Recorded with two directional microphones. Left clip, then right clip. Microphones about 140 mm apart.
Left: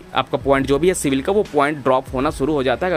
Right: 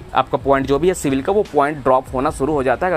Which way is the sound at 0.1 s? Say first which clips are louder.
Right 2 dB; 20° left (ahead or behind).